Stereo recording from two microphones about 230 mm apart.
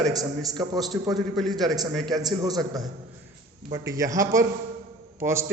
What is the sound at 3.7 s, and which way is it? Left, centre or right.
A man's voice, centre.